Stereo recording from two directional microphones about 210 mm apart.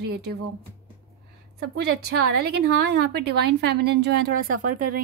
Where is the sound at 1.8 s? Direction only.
50° right (ahead or behind).